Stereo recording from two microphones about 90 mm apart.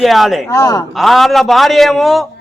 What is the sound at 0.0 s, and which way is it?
Speech, centre (ahead or behind).